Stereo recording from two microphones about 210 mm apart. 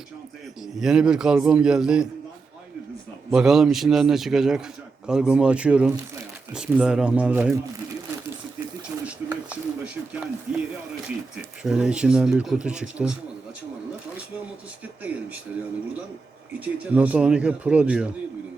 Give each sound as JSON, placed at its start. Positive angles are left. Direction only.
{"t": 0.8, "sound": "speech", "side_deg": -5}
{"t": 3.3, "sound": "speech", "side_deg": 0}
{"t": 9.0, "sound": "a sound", "side_deg": -5}
{"t": 11.6, "sound": "speech", "side_deg": -5}
{"t": 15.0, "sound": "speech", "side_deg": -5}
{"t": 16.6, "sound": "speech", "side_deg": -5}